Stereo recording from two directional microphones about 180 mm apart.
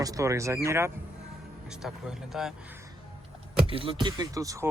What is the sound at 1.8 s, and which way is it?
Speech, centre (ahead or behind).